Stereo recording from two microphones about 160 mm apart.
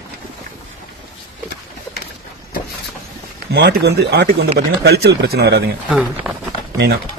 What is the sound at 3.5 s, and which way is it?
Speech, 90° right.